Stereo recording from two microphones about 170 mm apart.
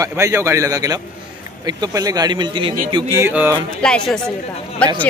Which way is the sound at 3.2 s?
10° right (ahead or behind).